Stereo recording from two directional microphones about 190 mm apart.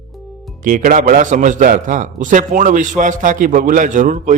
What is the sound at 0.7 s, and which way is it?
A man's voice, 45° right (ahead or behind).